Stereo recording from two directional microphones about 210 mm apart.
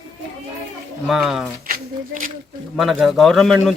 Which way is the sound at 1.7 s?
40° right (ahead or behind).